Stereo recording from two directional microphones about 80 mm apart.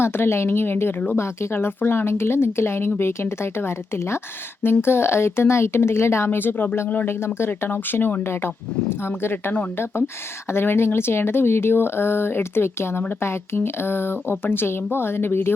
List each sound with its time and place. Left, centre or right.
0.0 s speech: left